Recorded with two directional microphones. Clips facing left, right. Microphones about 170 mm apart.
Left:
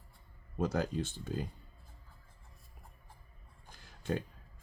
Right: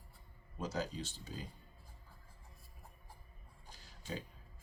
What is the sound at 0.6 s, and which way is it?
Speech, 55° left (ahead or behind).